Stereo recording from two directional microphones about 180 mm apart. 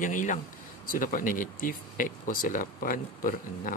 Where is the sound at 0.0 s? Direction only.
45° left (ahead or behind).